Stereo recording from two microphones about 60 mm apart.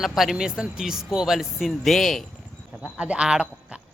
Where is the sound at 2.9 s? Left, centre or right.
Centre.